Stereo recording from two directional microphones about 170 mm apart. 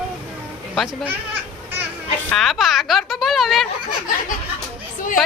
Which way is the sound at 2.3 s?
Centre (ahead or behind).